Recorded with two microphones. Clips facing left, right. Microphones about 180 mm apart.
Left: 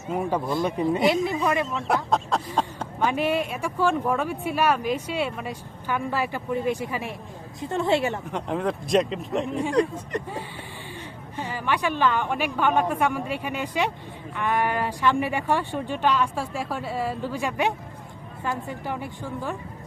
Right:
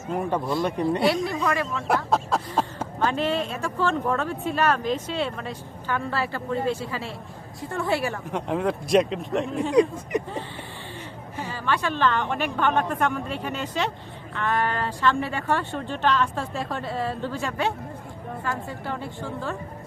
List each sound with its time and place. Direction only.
0.1 s speech: 5° left (ahead or behind)
0.9 s a woman's voice: 20° left (ahead or behind)
1.6 s speech: centre (ahead or behind)
3.0 s a woman's voice: 10° left (ahead or behind)
8.3 s speech: centre (ahead or behind)
11.4 s speech: 15° left (ahead or behind)